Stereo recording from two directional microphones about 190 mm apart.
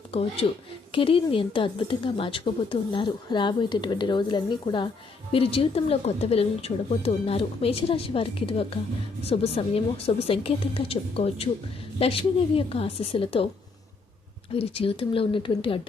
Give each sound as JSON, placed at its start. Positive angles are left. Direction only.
{"t": 0.1, "sound": "a woman's voice", "side_deg": 30}
{"t": 14.5, "sound": "a woman's voice", "side_deg": 30}